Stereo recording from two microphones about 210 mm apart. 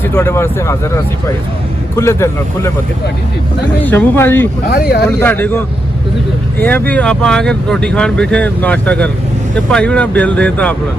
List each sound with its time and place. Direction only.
0.1 s speech: 15° left (ahead or behind)
2.0 s speech: 15° left (ahead or behind)
3.8 s speech: 10° left (ahead or behind)
4.7 s speech: 45° left (ahead or behind)
5.2 s speech: 10° left (ahead or behind)